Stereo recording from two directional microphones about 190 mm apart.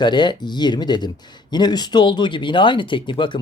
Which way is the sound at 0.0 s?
25° left (ahead or behind).